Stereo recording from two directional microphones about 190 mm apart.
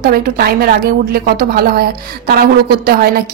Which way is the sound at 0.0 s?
50° right (ahead or behind).